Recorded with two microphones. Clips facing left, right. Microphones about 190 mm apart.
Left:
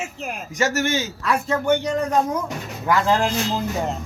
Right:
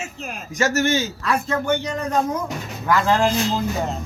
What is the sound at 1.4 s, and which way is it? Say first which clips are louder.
Speech: left 2 dB; 10° left (ahead or behind).